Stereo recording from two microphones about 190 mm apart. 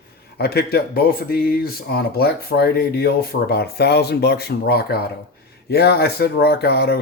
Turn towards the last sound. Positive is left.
turn(degrees=55)  # may be behind; listen again after turning